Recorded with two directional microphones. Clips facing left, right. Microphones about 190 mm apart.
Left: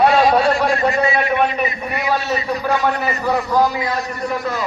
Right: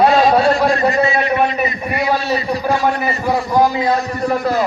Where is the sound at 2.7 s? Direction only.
30° right (ahead or behind).